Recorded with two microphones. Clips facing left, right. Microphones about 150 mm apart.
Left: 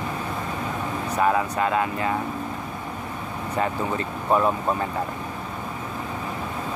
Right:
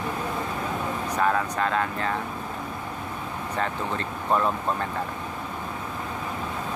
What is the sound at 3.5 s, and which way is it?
Speech, 10° left (ahead or behind).